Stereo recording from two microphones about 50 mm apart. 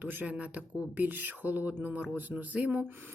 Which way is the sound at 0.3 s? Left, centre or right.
Right.